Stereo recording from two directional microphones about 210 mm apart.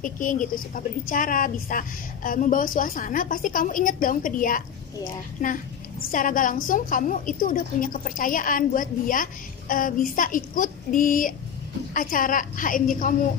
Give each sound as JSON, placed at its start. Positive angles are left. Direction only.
{"t": 0.0, "sound": "a woman's voice", "side_deg": 40}